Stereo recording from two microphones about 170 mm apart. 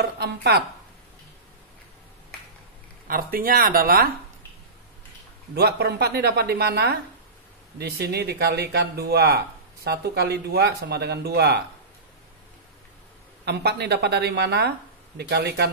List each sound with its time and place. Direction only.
0.0 s speech: 75° right (ahead or behind)
3.1 s speech: 60° right (ahead or behind)
5.5 s speech: 70° right (ahead or behind)
13.5 s speech: 75° right (ahead or behind)